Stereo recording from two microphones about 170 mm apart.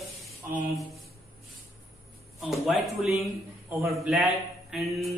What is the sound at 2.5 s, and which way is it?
Speech, centre (ahead or behind).